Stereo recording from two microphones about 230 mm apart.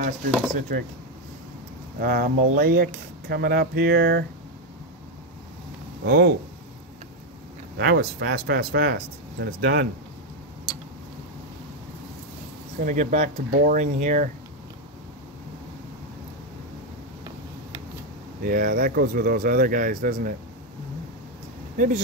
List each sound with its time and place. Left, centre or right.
0.6 s speech: right
2.0 s speech: right
6.0 s speech: right
7.7 s speech: right
12.8 s speech: right
18.4 s speech: right
21.7 s speech: right